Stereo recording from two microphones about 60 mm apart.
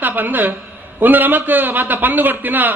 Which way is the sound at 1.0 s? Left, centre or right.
Right.